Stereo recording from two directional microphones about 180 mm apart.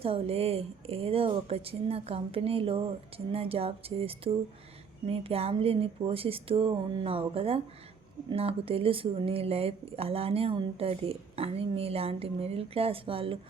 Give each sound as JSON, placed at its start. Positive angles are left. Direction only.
{"t": 0.0, "sound": "speech", "side_deg": -35}